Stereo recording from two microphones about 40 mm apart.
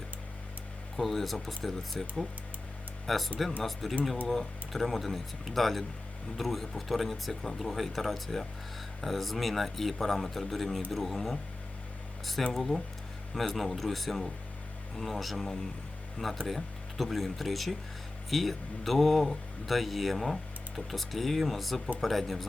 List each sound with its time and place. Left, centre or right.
0.9 s speech: centre
12.5 s speech: centre